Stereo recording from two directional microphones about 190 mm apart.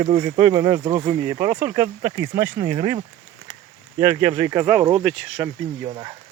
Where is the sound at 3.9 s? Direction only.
15° right (ahead or behind); by 5.5 s centre (ahead or behind).